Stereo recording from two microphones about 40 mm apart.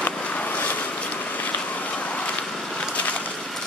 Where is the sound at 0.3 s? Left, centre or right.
Left.